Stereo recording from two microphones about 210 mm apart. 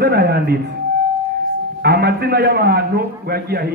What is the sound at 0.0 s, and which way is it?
Speech, 50° right (ahead or behind).